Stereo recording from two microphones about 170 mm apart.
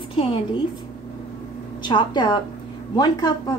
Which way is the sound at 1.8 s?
25° left (ahead or behind).